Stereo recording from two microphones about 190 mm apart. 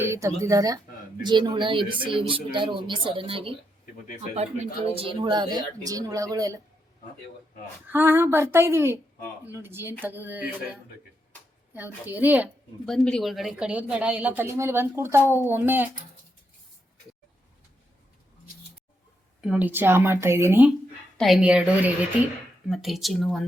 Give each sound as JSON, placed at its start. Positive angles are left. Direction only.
{"t": 0.0, "sound": "a woman's voice", "side_deg": -15}
{"t": 4.9, "sound": "speech", "side_deg": -25}
{"t": 7.9, "sound": "a woman's voice", "side_deg": -10}
{"t": 12.0, "sound": "a woman's voice", "side_deg": -10}
{"t": 12.8, "sound": "a woman's voice", "side_deg": 5}
{"t": 19.4, "sound": "a woman's voice", "side_deg": -5}
{"t": 21.2, "sound": "a woman's voice", "side_deg": 0}